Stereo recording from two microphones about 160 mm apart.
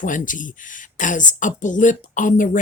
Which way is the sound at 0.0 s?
55° left (ahead or behind).